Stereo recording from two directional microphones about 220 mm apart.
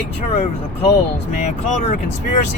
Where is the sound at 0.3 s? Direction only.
30° left (ahead or behind).